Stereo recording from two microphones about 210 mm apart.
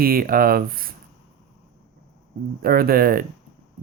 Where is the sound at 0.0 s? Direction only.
45° right (ahead or behind).